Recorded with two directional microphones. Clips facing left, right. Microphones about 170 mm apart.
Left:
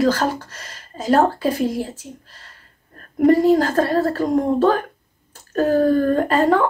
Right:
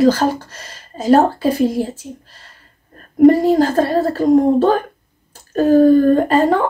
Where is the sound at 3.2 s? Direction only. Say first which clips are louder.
Right 4 dB; 30° right (ahead or behind).